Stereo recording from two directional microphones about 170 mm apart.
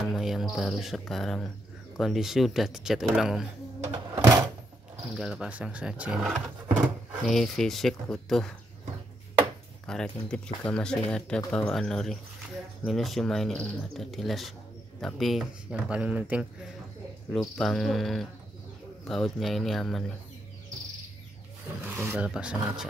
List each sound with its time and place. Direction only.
0.0 s speech: centre (ahead or behind)
4.1 s door: 20° right (ahead or behind)
5.1 s speech: 5° right (ahead or behind)
9.8 s speech: 5° left (ahead or behind)
17.6 s speech: centre (ahead or behind)
21.8 s speech: 10° right (ahead or behind)